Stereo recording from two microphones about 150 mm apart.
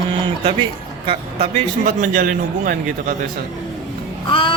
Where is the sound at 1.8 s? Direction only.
60° right (ahead or behind).